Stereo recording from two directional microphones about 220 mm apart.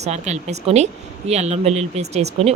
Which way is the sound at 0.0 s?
30° right (ahead or behind).